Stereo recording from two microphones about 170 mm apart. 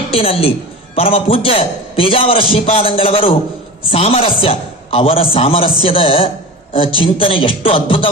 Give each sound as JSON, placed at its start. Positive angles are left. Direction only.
{"t": 0.1, "sound": "a man's voice", "side_deg": 35}